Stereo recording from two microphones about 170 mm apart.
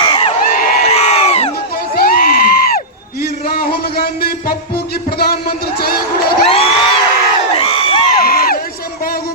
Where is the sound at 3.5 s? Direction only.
60° left (ahead or behind).